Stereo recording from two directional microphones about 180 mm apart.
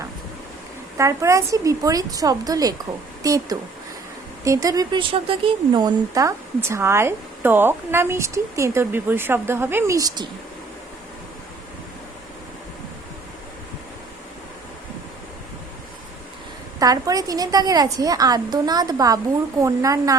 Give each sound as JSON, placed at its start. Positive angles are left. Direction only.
{"t": 0.9, "sound": "a woman's voice", "side_deg": -15}
{"t": 16.8, "sound": "a woman's voice", "side_deg": -20}